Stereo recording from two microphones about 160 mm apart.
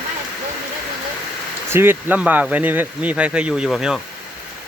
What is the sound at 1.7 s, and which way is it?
Speech, 15° right (ahead or behind).